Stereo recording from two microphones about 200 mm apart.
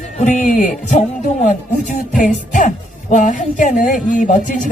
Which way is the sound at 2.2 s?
40° left (ahead or behind).